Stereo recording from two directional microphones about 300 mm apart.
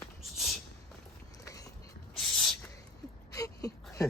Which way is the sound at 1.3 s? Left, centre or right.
Centre.